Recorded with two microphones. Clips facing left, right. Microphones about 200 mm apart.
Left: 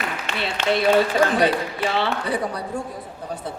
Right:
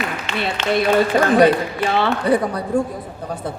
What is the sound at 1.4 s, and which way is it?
A woman's voice, 50° right (ahead or behind).